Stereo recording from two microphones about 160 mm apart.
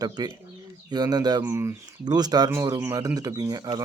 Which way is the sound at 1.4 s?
15° right (ahead or behind).